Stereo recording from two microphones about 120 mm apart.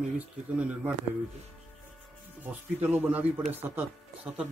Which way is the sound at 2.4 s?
15° right (ahead or behind).